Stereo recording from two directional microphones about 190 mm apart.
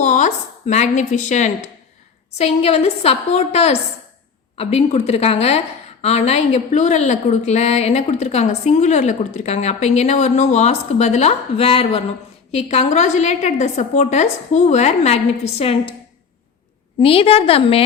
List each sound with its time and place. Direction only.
0.0 s a woman's voice: 40° left (ahead or behind)
17.0 s a woman's voice: 30° left (ahead or behind)